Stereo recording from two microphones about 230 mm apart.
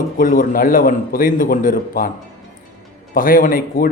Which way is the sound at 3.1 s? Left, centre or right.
Left.